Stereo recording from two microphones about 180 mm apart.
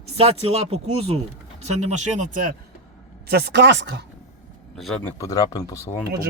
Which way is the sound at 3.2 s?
65° right (ahead or behind).